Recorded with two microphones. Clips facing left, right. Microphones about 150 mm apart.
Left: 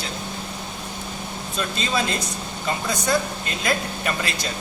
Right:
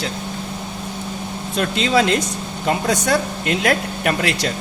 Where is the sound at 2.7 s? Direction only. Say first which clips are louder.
Right 5 dB; 90° right; by 4.5 s 70° right (ahead or behind).